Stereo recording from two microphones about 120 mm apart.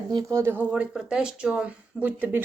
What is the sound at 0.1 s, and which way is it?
Speech, 35° right (ahead or behind).